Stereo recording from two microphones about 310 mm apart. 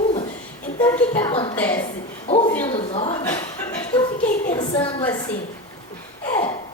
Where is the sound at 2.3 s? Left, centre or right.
Centre.